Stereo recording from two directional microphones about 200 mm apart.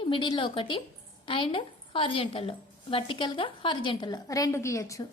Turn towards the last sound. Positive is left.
turn(degrees=15)  # may be behind; listen again after turning